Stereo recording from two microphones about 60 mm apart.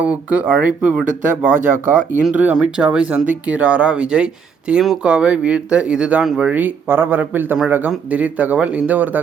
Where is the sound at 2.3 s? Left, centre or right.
Right.